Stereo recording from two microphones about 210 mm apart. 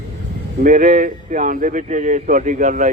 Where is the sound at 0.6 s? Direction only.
40° right (ahead or behind).